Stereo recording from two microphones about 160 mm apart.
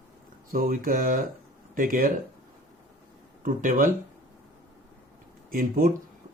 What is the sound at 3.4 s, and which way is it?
Speech, 60° right (ahead or behind).